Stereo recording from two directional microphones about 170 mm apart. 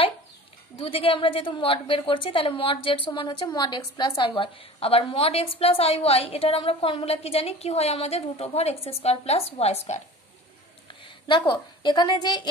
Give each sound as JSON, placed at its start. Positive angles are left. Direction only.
{"t": 0.7, "sound": "a woman's voice", "side_deg": 30}
{"t": 10.9, "sound": "a woman's voice", "side_deg": 30}